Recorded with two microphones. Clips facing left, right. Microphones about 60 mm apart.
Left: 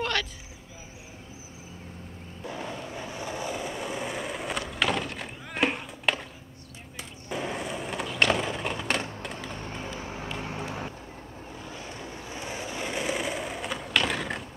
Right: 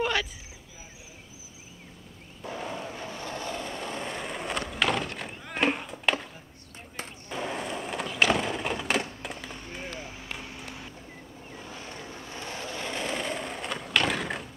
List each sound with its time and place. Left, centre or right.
0.0 s a sound: centre
2.4 s a sound: centre
3.1 s skateboard: centre
7.2 s skateboard: centre
9.9 s vehicle: left
12.3 s skateboard: centre